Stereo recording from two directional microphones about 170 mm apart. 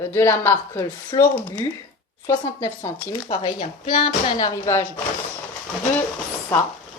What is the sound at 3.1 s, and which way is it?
Speech, 30° left (ahead or behind).